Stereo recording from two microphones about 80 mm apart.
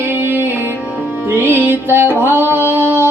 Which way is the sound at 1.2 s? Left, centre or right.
Right.